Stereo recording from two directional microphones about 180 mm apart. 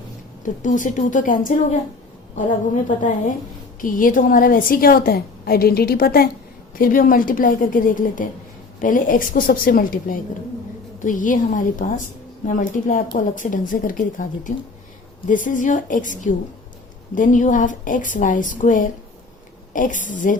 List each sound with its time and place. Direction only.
0.4 s a woman's voice: 45° left (ahead or behind)